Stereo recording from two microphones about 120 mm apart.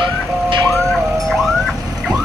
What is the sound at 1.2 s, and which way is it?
Car alarm, centre (ahead or behind).